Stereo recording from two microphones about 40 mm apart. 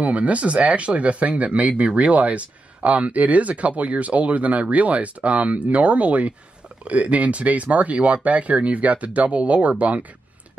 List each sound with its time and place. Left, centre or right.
0.0 s speech: right